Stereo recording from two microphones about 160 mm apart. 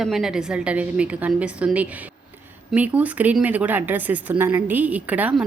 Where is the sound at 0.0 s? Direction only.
Centre (ahead or behind).